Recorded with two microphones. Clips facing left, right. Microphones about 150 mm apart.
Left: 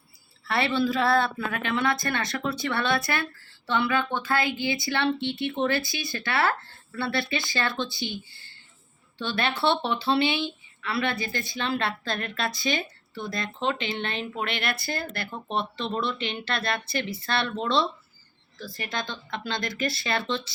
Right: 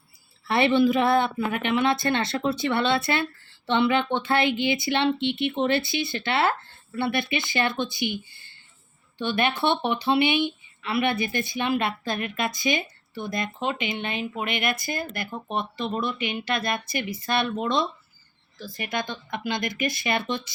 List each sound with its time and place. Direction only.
0.4 s speech: 20° right (ahead or behind)